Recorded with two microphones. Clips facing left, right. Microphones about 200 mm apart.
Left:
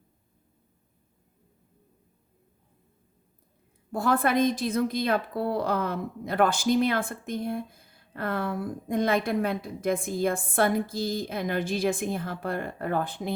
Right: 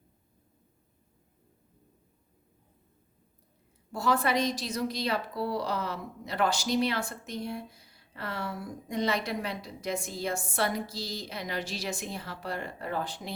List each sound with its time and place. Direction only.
3.9 s a woman's voice: 55° left (ahead or behind)